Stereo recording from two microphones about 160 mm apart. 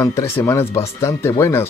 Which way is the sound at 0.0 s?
20° left (ahead or behind).